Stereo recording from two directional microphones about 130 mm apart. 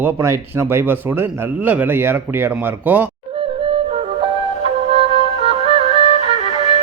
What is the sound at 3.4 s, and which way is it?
Music, 45° right (ahead or behind).